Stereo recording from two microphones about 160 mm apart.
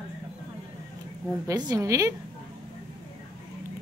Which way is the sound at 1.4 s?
25° right (ahead or behind).